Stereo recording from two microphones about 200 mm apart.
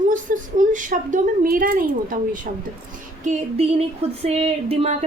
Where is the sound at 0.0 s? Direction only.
40° right (ahead or behind).